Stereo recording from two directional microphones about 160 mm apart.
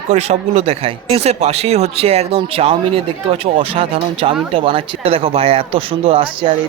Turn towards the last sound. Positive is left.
turn(degrees=-35)  # may be behind; listen again after turning